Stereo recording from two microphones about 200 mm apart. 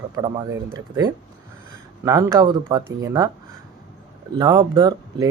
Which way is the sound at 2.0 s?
15° right (ahead or behind).